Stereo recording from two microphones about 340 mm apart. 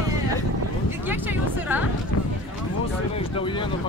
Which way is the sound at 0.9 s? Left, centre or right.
Centre.